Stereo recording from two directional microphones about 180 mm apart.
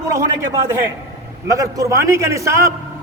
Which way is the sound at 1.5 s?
20° right (ahead or behind).